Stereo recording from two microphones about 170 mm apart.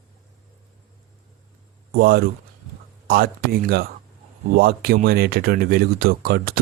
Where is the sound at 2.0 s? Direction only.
65° right (ahead or behind).